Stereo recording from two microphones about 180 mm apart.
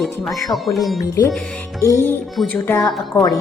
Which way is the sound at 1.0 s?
20° left (ahead or behind).